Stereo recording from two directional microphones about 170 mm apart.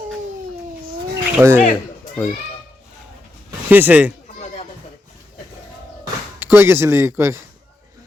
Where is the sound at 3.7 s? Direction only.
10° right (ahead or behind).